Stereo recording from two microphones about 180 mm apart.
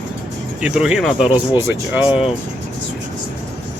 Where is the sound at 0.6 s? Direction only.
5° right (ahead or behind).